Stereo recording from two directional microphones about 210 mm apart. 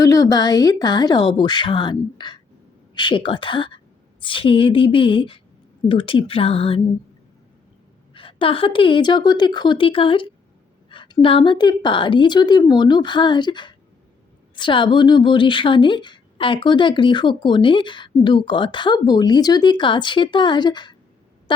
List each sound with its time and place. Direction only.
0.0 s a woman's voice: 15° left (ahead or behind)
8.1 s a woman's voice: 25° left (ahead or behind)